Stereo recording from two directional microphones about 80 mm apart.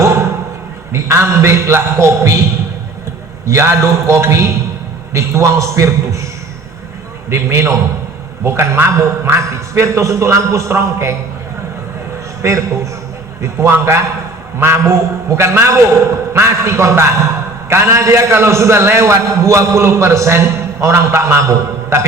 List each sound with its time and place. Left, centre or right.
0.0 s a sound: right
0.9 s a man's voice: right
3.4 s a man's voice: right
7.3 s a man's voice: right
12.4 s a man's voice: right